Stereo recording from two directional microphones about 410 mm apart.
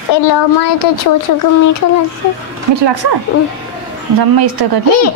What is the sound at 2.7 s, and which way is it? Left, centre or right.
Speech, right.